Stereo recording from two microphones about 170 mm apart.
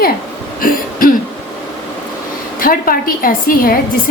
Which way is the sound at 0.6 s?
55° left (ahead or behind).